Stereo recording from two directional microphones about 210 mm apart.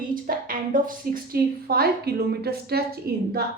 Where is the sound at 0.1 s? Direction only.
40° right (ahead or behind).